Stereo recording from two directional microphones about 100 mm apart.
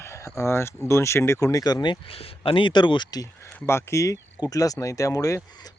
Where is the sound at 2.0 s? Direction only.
70° left (ahead or behind); by 3.2 s 45° left (ahead or behind).